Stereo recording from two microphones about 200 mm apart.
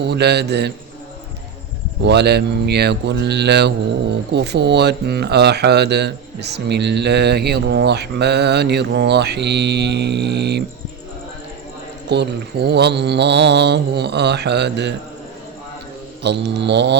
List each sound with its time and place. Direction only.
0.0 s speech: 55° right (ahead or behind)
2.0 s speech: 55° right (ahead or behind)
12.0 s speech: 55° right (ahead or behind)
16.2 s speech: 60° right (ahead or behind)